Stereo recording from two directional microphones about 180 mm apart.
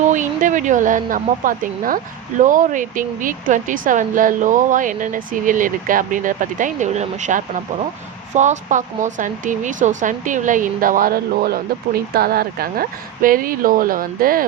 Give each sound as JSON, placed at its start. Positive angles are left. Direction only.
{"t": 0.1, "sound": "speech", "side_deg": -45}